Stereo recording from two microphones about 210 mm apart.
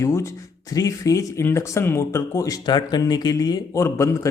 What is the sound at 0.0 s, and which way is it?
A man's voice, 15° left (ahead or behind).